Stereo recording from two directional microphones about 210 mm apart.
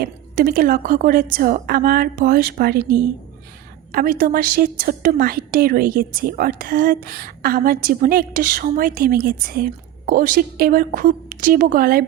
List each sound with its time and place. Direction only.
0.0 s a woman's voice: 45° right (ahead or behind)
3.9 s a woman's voice: 45° right (ahead or behind)